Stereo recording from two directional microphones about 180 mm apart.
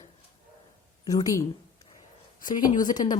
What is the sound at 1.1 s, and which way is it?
Speech, 20° left (ahead or behind).